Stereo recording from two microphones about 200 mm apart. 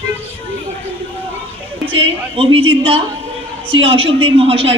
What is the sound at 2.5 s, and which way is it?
A woman's voice, 25° right (ahead or behind).